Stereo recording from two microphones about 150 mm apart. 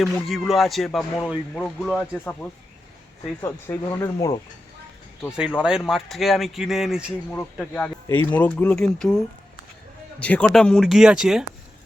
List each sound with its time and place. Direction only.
0.0 s speech: centre (ahead or behind)
3.4 s speech: 15° left (ahead or behind)
5.4 s speech: 5° right (ahead or behind)
7.3 s speech: 10° left (ahead or behind)